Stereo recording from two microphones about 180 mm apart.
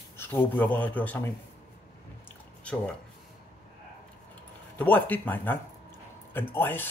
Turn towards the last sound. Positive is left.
turn(degrees=10)  # may be behind; listen again after turning